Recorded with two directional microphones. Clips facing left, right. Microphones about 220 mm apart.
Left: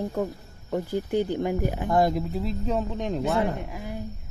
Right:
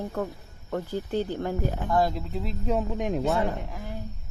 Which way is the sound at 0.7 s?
15° left (ahead or behind).